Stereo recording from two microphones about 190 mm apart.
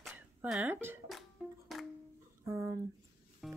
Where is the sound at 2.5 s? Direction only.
15° right (ahead or behind).